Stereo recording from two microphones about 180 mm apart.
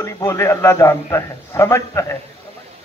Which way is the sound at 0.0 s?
15° left (ahead or behind).